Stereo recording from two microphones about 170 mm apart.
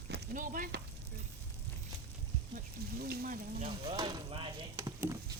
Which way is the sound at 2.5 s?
65° right (ahead or behind).